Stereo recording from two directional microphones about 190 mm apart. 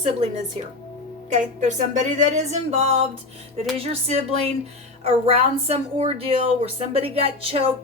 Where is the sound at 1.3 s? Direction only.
40° right (ahead or behind).